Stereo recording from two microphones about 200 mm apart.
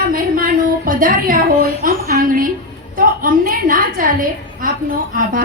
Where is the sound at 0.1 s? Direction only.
45° right (ahead or behind).